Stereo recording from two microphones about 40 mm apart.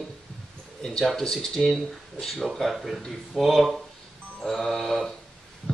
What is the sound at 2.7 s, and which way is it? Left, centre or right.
Music, centre.